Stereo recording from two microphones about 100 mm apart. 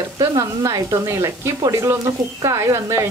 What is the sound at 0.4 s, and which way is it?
Speech, 30° right (ahead or behind).